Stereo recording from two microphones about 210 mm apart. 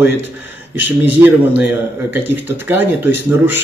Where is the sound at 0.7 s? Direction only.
10° right (ahead or behind).